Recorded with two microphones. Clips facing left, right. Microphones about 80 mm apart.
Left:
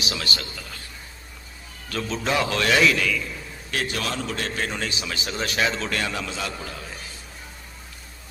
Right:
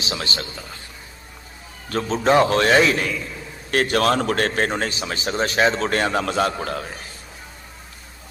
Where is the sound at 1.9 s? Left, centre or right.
Right.